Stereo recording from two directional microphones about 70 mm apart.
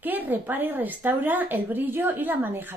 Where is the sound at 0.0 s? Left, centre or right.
Right.